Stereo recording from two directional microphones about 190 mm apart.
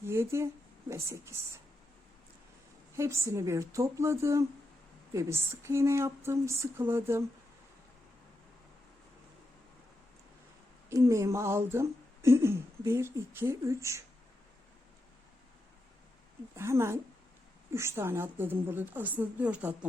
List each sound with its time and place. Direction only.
0.0 s speech: 15° right (ahead or behind)
2.9 s speech: 15° right (ahead or behind)
10.8 s speech: 15° right (ahead or behind)
16.6 s speech: 15° right (ahead or behind)